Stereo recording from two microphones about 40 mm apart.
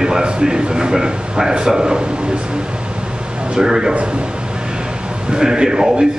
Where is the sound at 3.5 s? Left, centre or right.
Centre.